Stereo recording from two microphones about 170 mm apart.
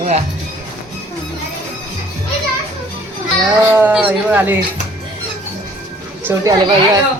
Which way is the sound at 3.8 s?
10° right (ahead or behind).